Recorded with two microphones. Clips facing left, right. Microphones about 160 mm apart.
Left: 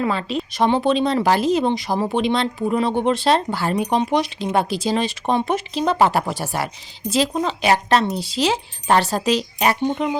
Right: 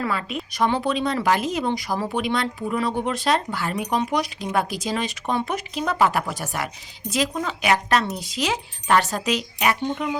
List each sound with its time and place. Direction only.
0.0 s a woman's voice: 30° left (ahead or behind)